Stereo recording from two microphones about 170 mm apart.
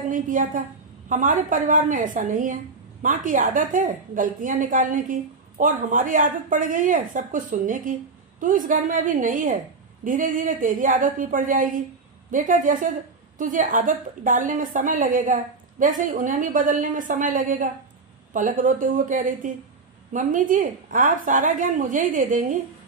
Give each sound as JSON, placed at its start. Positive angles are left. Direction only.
{"t": 0.1, "sound": "a woman's voice", "side_deg": -50}